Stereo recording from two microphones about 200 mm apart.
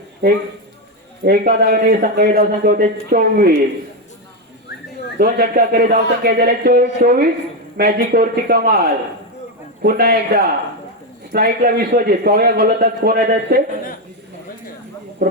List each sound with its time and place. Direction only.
1.2 s a man's voice: 50° right (ahead or behind)
5.1 s a man's voice: 50° right (ahead or behind)
15.2 s speech: 45° right (ahead or behind)